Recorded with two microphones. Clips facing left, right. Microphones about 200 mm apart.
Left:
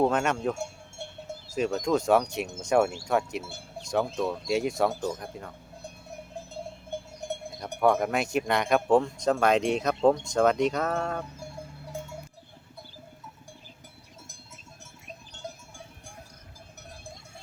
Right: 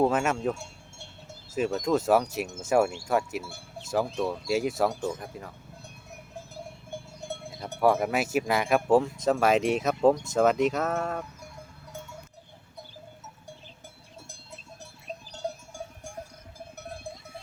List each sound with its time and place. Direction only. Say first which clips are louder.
0.0 s speech: even; 5° right (ahead or behind)
0.5 s cowbell: left 7 dB; 50° left (ahead or behind)
1.5 s speech: even; 5° right (ahead or behind)
6.5 s a sound: left 4 dB; 20° left (ahead or behind)
7.8 s speech: even; 5° right (ahead or behind)
11.3 s sheep: left 5 dB; 30° left (ahead or behind)
15.0 s goat: right 7 dB; 40° right (ahead or behind)